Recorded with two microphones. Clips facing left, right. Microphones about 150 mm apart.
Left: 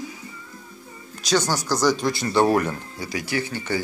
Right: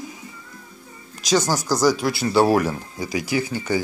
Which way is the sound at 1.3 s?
5° right (ahead or behind).